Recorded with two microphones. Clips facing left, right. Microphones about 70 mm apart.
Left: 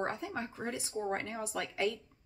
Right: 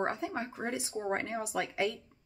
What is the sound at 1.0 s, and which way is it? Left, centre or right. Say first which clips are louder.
Speech: right 1 dB; right.